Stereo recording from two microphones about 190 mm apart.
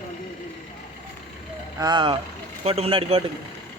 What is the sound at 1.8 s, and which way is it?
A man's voice, 25° right (ahead or behind).